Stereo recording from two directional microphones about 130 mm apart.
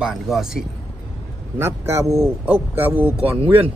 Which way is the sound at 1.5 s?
20° right (ahead or behind).